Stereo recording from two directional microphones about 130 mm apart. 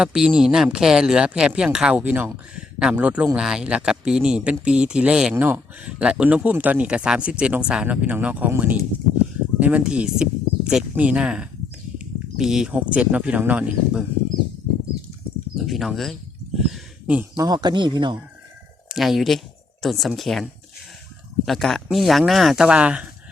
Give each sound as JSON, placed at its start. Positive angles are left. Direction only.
{"t": 0.0, "sound": "speech", "side_deg": -5}
{"t": 15.5, "sound": "a sound", "side_deg": 0}
{"t": 17.3, "sound": "speech", "side_deg": -30}
{"t": 18.9, "sound": "speech", "side_deg": 0}